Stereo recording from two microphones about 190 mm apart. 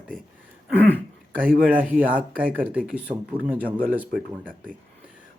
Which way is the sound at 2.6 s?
5° right (ahead or behind).